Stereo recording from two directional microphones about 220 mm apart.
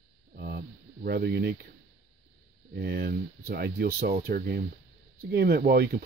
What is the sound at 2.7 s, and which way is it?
Speech, 45° right (ahead or behind).